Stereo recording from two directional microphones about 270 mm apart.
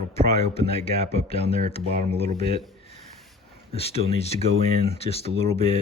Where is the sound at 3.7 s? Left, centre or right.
Left.